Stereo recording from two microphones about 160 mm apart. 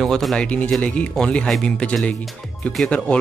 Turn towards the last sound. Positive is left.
turn(degrees=5)  # may be behind; listen again after turning